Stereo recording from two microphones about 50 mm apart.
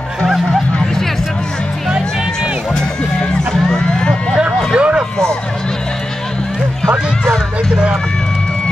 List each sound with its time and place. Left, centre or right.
2.7 s music: centre
4.7 s vehicle: right